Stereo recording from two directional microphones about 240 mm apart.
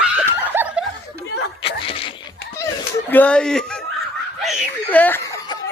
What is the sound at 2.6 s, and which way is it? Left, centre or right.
Snicker, centre.